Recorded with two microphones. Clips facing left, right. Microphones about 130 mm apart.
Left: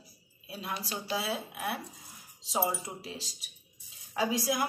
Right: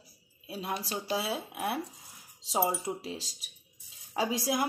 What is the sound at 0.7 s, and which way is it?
Speech, 40° right (ahead or behind).